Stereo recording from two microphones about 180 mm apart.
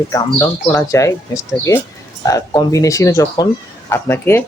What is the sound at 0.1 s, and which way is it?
Speech, 10° left (ahead or behind).